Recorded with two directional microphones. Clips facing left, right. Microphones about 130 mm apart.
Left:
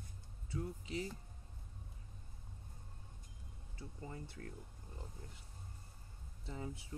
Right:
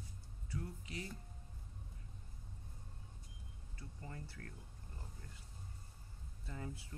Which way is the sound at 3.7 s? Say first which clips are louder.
Left 3 dB; 20° left (ahead or behind).